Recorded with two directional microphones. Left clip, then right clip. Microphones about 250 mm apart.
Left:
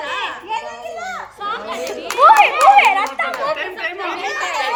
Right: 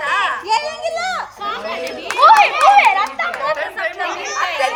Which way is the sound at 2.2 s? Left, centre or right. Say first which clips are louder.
Even; left.